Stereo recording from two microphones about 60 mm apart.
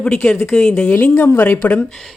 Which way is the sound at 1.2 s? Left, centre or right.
Left.